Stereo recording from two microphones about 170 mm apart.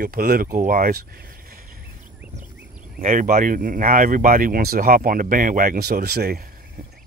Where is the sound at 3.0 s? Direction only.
50° right (ahead or behind).